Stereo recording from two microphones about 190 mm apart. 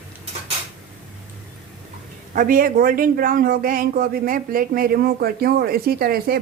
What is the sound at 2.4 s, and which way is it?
A man's voice, 45° right (ahead or behind).